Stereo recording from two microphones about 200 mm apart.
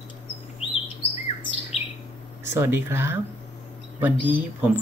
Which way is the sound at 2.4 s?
10° right (ahead or behind).